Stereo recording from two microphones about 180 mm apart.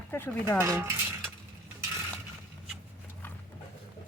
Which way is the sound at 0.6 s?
15° right (ahead or behind).